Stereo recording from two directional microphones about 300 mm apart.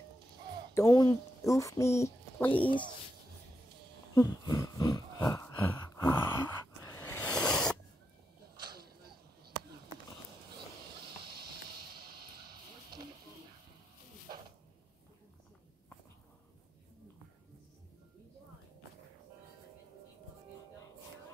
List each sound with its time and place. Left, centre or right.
0.7 s a woman's voice: centre
4.1 s a sound: centre
11.9 s music: right